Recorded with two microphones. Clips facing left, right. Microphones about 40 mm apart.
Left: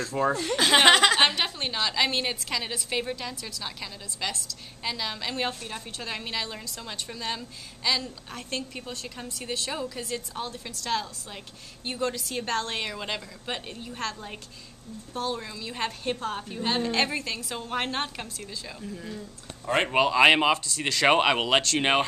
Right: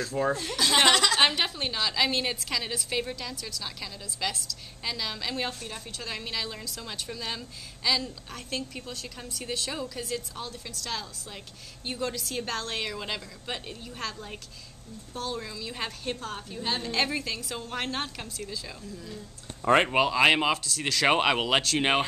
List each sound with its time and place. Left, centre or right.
0.0 s speech: centre
0.6 s speech: left
1.3 s a woman's voice: centre
18.8 s speech: left
19.9 s speech: centre